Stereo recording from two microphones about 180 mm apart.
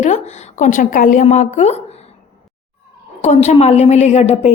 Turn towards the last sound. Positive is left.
turn(degrees=35)  # may be behind; listen again after turning